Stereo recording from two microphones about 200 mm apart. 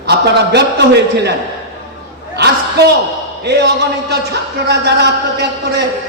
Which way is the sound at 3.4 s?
55° right (ahead or behind).